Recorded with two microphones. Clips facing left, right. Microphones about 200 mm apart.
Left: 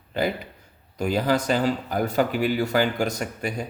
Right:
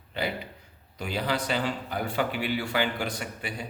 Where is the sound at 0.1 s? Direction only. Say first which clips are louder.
Left 6 dB; 45° left (ahead or behind).